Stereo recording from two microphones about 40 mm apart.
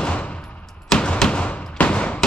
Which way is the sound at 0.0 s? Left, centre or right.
Left.